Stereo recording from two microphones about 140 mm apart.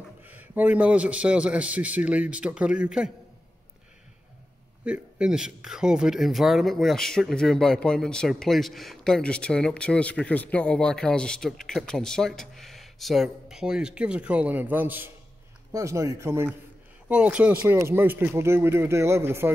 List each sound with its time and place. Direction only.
0.2 s a man's voice: 10° right (ahead or behind)
4.8 s a man's voice: 5° right (ahead or behind)